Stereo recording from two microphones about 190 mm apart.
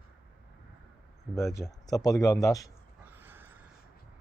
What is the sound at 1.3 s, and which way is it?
Speech, 15° left (ahead or behind).